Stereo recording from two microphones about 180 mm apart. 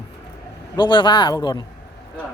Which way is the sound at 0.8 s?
25° left (ahead or behind).